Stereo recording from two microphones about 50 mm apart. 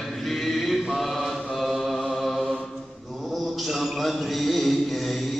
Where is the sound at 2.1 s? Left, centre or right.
Centre.